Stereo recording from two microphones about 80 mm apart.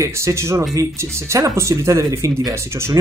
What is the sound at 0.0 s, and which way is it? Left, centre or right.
Speech, right.